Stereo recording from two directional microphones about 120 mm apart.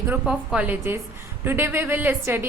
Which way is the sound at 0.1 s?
10° right (ahead or behind).